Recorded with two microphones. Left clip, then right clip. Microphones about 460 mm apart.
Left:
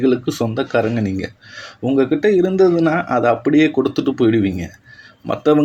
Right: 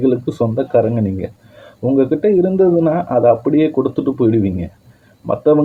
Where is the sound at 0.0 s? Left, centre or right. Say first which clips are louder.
Right 1 dB; right.